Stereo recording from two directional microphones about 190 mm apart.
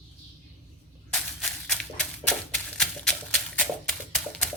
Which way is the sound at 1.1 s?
5° left (ahead or behind).